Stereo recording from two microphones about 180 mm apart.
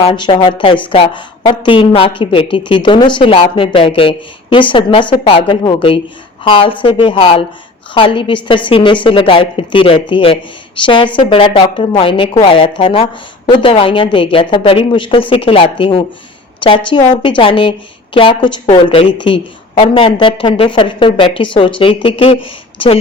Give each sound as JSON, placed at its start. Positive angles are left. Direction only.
{"t": 0.0, "sound": "a woman's voice", "side_deg": 30}